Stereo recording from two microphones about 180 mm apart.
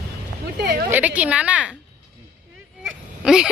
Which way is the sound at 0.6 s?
60° right (ahead or behind).